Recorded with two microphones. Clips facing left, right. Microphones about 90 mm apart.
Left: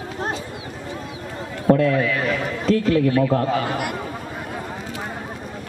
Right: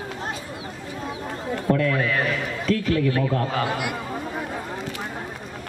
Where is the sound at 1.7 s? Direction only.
70° left (ahead or behind).